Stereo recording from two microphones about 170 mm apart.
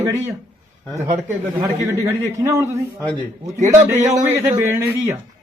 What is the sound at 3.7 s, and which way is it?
A man's voice, 15° right (ahead or behind).